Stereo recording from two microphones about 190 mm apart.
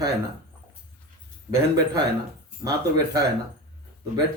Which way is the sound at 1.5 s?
20° right (ahead or behind).